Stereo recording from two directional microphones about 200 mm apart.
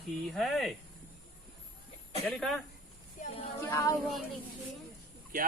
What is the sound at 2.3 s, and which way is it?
Speech, centre (ahead or behind).